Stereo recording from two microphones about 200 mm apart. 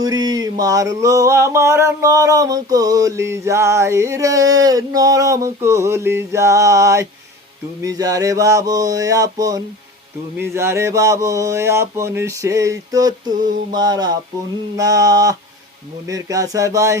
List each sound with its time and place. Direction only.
0.0 s music: 20° right (ahead or behind)
13.3 s a sound: 40° right (ahead or behind)
13.7 s mantra: 20° right (ahead or behind)
14.8 s music: 15° right (ahead or behind)